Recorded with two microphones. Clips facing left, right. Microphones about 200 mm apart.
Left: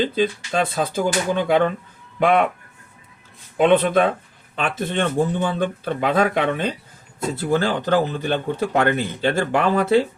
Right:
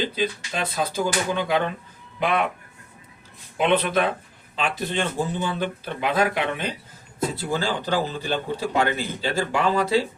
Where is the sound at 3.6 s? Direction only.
50° left (ahead or behind).